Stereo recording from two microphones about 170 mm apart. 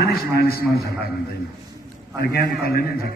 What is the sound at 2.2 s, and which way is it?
Speech, 65° left (ahead or behind).